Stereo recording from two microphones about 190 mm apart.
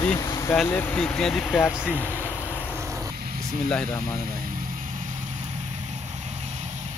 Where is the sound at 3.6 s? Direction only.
5° left (ahead or behind).